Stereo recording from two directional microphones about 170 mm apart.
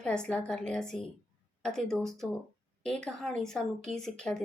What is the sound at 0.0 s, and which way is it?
Speech, 5° left (ahead or behind).